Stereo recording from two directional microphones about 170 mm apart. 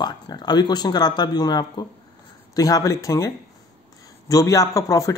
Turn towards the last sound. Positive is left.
turn(degrees=20)  # may be behind; listen again after turning